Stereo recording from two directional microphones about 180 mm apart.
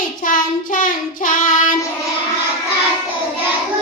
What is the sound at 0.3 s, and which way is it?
Child singing, 50° left (ahead or behind).